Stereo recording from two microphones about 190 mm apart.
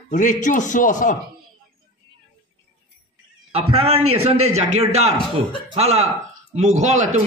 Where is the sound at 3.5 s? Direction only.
30° right (ahead or behind).